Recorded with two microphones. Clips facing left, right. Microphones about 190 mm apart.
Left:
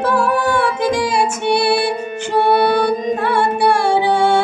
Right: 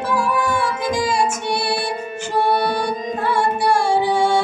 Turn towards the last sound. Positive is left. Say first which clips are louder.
# left 3 dB
turn(degrees=65)  # may be behind; listen again after turning